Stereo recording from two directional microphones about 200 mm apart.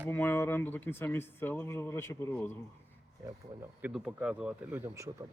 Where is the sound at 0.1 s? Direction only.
10° left (ahead or behind).